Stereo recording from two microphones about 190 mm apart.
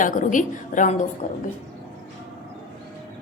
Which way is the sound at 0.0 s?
45° left (ahead or behind).